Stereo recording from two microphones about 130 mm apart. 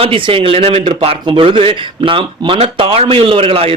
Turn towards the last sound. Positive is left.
turn(degrees=-45)  # may be behind; listen again after turning